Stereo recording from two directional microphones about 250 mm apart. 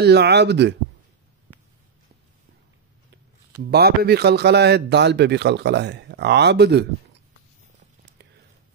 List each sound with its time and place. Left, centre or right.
0.0 s a man's voice: right
3.7 s a man's voice: right